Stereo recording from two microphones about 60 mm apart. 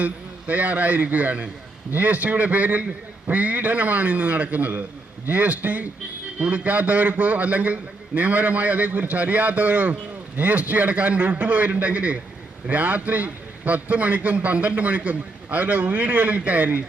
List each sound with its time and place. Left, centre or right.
0.0 s a man's voice: right